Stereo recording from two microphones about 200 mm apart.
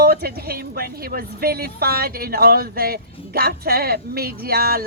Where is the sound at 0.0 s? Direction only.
50° right (ahead or behind).